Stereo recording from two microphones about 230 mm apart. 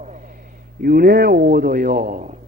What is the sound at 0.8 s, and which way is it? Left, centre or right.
A man's voice, right.